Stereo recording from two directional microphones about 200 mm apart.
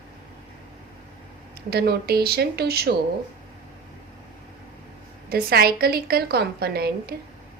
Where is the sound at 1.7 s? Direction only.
50° right (ahead or behind).